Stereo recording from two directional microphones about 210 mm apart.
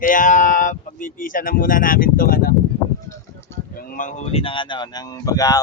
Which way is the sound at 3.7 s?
45° left (ahead or behind).